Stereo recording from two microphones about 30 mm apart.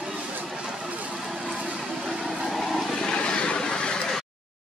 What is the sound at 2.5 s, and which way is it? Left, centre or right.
Vehicle, centre.